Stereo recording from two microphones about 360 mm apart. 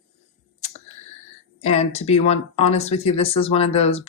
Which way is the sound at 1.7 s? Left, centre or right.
Centre.